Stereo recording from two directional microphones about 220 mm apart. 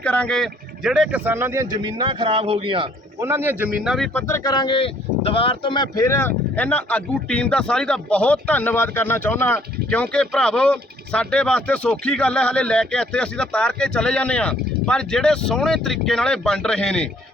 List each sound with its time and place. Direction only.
0.0 s a man's voice: 5° left (ahead or behind); by 3.2 s 25° right (ahead or behind)
3.2 s speech: 10° right (ahead or behind)